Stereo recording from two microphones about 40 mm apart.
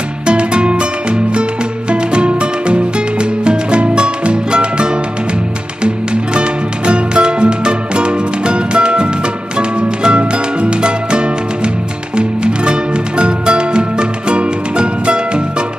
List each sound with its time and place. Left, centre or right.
0.3 s music: right
6.9 s music: right
13.2 s music: right